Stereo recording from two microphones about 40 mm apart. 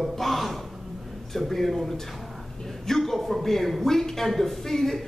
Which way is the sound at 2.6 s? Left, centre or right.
Centre.